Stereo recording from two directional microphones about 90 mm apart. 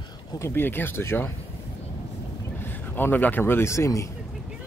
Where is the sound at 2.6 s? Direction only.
20° left (ahead or behind).